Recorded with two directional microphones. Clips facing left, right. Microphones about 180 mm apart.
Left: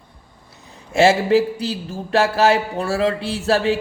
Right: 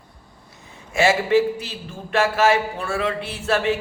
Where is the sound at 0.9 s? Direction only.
35° left (ahead or behind).